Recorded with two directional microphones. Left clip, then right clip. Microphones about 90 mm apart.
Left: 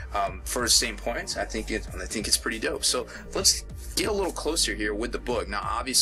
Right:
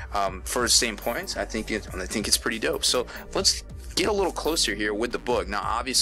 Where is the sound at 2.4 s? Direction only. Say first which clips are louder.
Right 2 dB; 40° right (ahead or behind).